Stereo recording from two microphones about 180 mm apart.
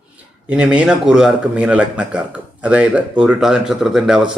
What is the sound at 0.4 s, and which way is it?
Speech, 5° right (ahead or behind).